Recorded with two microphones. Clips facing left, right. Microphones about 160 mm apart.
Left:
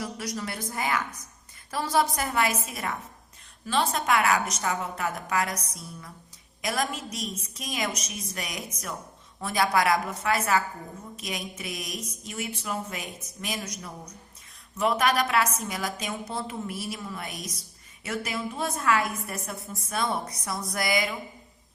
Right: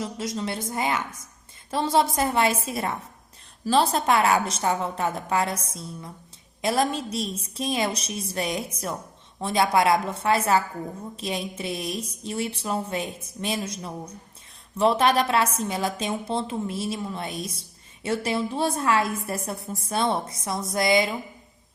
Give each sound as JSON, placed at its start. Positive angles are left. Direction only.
{"t": 0.0, "sound": "a woman's voice", "side_deg": -25}